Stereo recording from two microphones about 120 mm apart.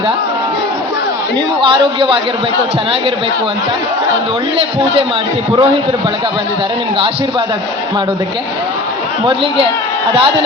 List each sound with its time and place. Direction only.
1.6 s a man's voice: 45° right (ahead or behind)
9.2 s a man's voice: 50° right (ahead or behind)